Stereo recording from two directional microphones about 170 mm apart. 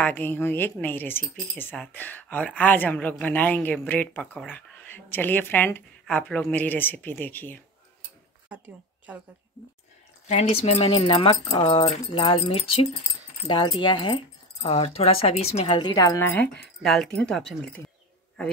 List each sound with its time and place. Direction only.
0.0 s speech: 10° left (ahead or behind)
8.5 s speech: 10° right (ahead or behind)
10.2 s speech: 40° left (ahead or behind)
10.9 s speech: 30° left (ahead or behind)
14.6 s speech: 35° left (ahead or behind); by 16.6 s 10° left (ahead or behind)
16.8 s speech: centre (ahead or behind)